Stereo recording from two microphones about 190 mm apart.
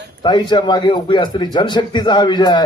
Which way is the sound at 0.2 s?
25° left (ahead or behind).